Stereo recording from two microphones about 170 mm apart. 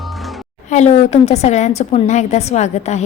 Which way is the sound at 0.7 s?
45° left (ahead or behind).